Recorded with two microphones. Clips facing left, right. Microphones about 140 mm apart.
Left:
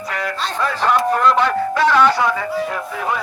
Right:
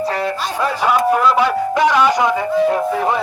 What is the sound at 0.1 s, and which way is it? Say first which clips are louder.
Music: right 5 dB; 30° right (ahead or behind).